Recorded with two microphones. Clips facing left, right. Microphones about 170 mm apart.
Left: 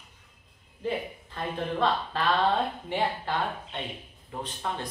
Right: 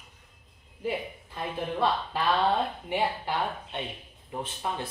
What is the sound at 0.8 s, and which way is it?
Speech, 15° right (ahead or behind).